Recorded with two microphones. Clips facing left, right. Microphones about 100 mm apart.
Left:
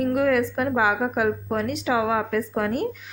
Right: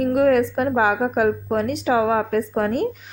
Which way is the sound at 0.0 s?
45° right (ahead or behind).